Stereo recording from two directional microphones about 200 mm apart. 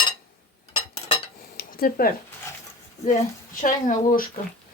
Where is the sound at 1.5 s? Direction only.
50° left (ahead or behind).